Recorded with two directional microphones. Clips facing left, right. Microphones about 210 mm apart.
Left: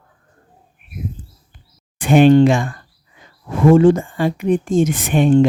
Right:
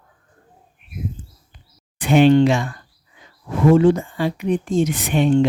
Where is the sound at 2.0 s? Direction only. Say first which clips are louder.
Left 3 dB; 50° left (ahead or behind).